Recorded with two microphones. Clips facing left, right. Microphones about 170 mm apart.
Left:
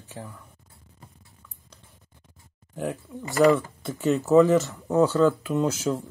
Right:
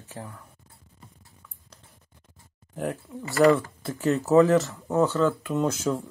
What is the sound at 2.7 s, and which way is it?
Speech, centre (ahead or behind).